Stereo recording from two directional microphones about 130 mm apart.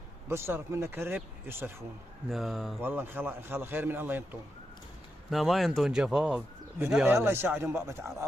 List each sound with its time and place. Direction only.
0.3 s a man's voice: 20° right (ahead or behind)
2.3 s speech: centre (ahead or behind)
2.8 s a man's voice: 15° right (ahead or behind)
5.3 s speech: centre (ahead or behind)
6.9 s speech: 15° right (ahead or behind)